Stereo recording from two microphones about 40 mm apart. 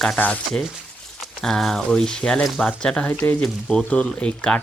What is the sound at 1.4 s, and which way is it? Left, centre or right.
Speech, centre.